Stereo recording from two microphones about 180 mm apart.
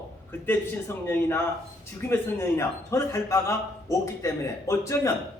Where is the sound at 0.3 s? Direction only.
10° left (ahead or behind).